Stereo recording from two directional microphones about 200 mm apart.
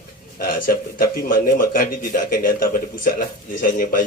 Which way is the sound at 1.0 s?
45° left (ahead or behind).